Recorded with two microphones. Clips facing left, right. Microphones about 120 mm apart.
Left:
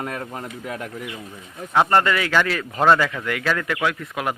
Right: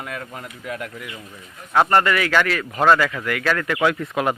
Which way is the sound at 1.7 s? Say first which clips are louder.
Right 1 dB; 15° left (ahead or behind).